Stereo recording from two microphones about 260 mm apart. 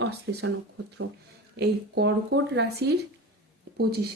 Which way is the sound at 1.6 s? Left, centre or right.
Right.